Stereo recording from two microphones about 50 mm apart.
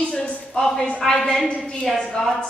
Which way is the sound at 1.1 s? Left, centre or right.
Centre.